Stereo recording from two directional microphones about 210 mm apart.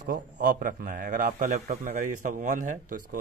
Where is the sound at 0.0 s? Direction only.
45° right (ahead or behind).